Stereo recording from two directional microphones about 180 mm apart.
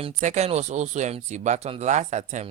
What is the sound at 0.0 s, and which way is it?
Speech, 40° right (ahead or behind).